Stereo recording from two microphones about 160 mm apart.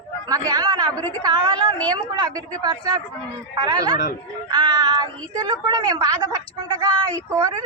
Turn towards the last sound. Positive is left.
turn(degrees=-25)  # may be behind; listen again after turning